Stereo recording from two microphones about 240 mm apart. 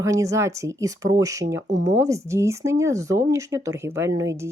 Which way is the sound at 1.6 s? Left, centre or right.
Right.